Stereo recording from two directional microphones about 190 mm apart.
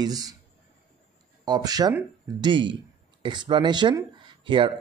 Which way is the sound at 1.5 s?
20° right (ahead or behind).